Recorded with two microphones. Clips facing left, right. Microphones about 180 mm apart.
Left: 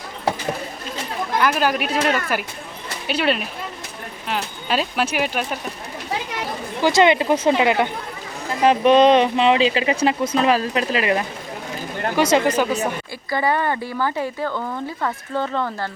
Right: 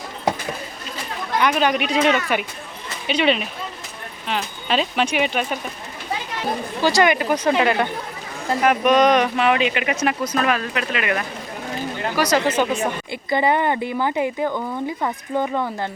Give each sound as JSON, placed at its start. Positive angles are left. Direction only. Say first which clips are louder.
{"t": 1.4, "sound": "speech", "louder": "right 1 dB", "side_deg": 5}
{"t": 6.8, "sound": "speech", "louder": "left 2 dB", "side_deg": 20}
{"t": 8.6, "sound": "speech", "louder": "left 3 dB", "side_deg": 25}
{"t": 12.5, "sound": "speech", "louder": "even", "side_deg": 5}
{"t": 13.1, "sound": "speech", "louder": "right 5 dB", "side_deg": -20}